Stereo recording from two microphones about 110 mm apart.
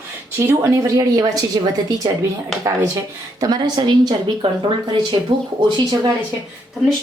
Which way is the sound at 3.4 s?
40° right (ahead or behind).